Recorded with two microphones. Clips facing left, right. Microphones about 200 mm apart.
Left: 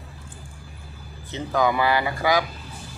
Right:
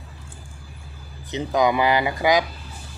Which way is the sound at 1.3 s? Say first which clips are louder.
Right 2 dB; 15° right (ahead or behind).